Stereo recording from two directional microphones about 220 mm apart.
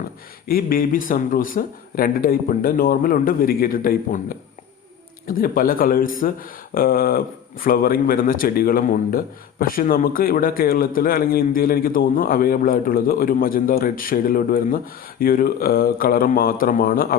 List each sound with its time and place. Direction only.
0.4 s speech: 40° left (ahead or behind)